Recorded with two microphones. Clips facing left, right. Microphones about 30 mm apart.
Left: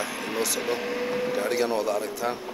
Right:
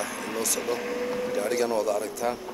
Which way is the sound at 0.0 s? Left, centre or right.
Left.